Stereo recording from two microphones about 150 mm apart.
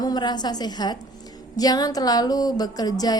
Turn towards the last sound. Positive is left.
turn(degrees=25)  # may be behind; listen again after turning